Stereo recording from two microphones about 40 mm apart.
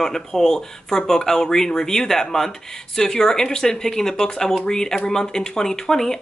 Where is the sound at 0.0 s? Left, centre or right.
Centre.